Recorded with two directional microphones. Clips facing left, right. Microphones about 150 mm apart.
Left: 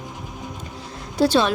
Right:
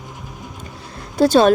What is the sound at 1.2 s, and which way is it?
Speech, 45° right (ahead or behind).